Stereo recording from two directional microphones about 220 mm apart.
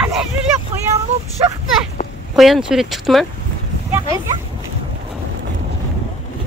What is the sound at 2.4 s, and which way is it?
Speech, centre (ahead or behind).